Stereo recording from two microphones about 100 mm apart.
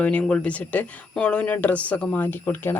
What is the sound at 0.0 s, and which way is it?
Speech, 15° left (ahead or behind).